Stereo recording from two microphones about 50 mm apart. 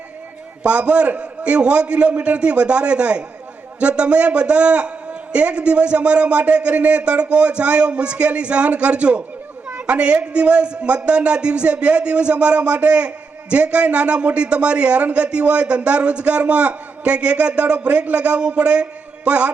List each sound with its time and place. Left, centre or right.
0.6 s a man's voice: right